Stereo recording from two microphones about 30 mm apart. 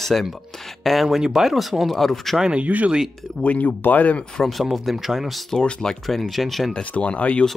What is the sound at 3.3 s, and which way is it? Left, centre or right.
Speech, left.